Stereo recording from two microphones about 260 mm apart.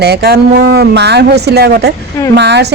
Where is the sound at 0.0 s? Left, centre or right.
Right.